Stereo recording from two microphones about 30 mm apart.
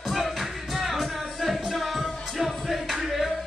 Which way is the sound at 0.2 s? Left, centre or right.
Centre.